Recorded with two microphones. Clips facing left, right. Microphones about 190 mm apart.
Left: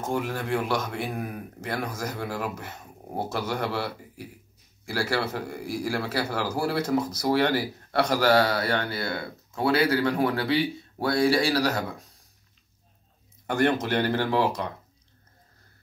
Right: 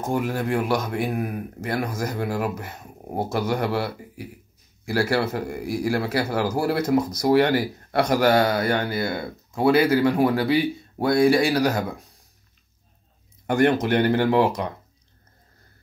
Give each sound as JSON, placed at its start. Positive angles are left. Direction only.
{"t": 0.1, "sound": "speech", "side_deg": -10}
{"t": 11.3, "sound": "speech", "side_deg": -15}
{"t": 13.5, "sound": "speech", "side_deg": -15}